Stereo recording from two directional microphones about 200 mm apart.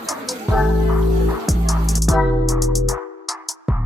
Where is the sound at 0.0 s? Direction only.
Centre (ahead or behind).